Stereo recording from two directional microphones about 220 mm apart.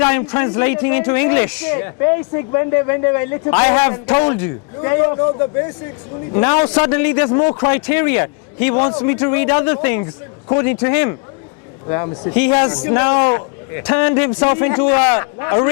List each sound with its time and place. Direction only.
0.0 s a man's voice: 15° left (ahead or behind)
6.3 s a man's voice: 25° left (ahead or behind)